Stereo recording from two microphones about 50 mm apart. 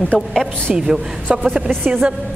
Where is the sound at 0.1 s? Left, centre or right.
Centre.